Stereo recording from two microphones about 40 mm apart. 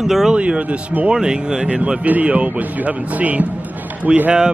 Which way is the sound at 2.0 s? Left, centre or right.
Right.